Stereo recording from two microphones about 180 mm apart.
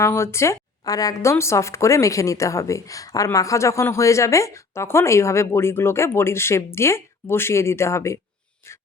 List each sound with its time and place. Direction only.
0.0 s speech: 15° left (ahead or behind)